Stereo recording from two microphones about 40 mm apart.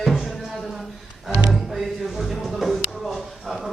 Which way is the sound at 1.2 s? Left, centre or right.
Centre.